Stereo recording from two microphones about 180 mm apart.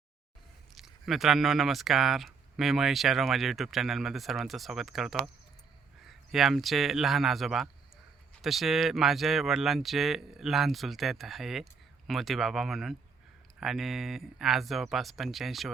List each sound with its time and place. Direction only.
0.8 s speech: centre (ahead or behind)